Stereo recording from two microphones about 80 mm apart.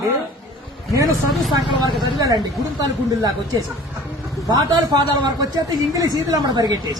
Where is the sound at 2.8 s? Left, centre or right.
Right.